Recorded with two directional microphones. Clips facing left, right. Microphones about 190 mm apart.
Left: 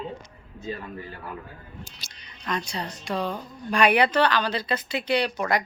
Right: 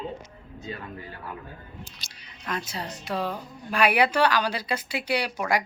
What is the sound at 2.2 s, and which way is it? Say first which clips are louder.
A woman's voice: left 2 dB; 5° right (ahead or behind).